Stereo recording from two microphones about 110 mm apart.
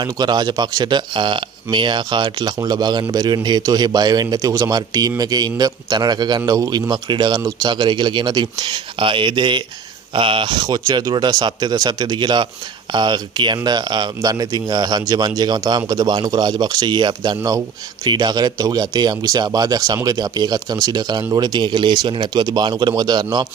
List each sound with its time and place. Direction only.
0.0 s speech: 40° right (ahead or behind)